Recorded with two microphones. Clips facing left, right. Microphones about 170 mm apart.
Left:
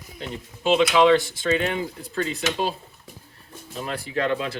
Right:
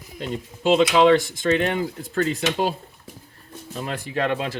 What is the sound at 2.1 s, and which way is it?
Speech, 45° right (ahead or behind).